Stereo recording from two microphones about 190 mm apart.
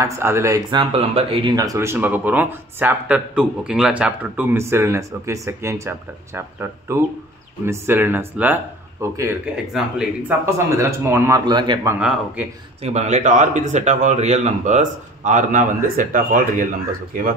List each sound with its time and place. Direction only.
0.0 s speech: 15° right (ahead or behind)
0.7 s speech: 30° right (ahead or behind)
9.7 s speech: 5° right (ahead or behind); by 12.0 s 20° right (ahead or behind)
12.0 s speech: 5° right (ahead or behind)
12.8 s speech: 35° right (ahead or behind)